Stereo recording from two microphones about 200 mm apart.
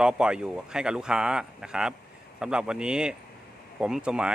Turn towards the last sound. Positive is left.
turn(degrees=-5)  # may be behind; listen again after turning